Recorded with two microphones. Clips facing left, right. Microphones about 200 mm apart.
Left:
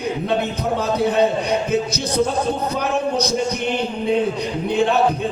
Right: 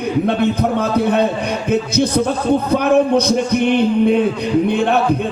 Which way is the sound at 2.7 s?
55° right (ahead or behind).